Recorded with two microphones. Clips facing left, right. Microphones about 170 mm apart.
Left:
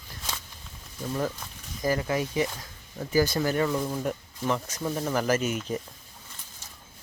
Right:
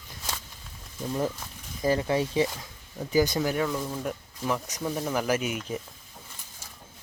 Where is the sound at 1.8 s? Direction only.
25° right (ahead or behind); by 3.6 s 10° right (ahead or behind).